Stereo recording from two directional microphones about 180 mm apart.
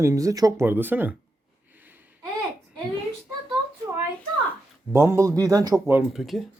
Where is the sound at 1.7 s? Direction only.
10° right (ahead or behind).